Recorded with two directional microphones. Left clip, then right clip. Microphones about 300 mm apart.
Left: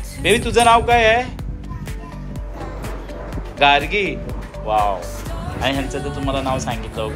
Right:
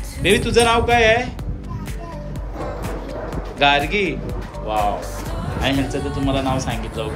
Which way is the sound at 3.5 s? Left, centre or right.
Centre.